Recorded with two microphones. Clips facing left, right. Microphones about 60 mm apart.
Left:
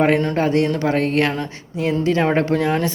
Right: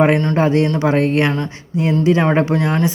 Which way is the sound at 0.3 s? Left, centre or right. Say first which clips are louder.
Right 3 dB; right.